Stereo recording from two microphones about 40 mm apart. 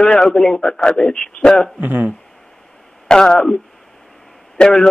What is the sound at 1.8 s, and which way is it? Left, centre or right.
Speech, right.